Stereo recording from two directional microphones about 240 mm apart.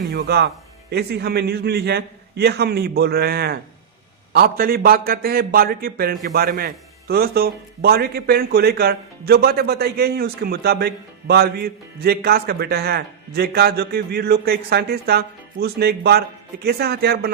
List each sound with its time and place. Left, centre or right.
0.1 s a man's voice: right